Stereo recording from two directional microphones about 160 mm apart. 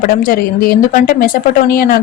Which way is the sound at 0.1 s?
65° left (ahead or behind).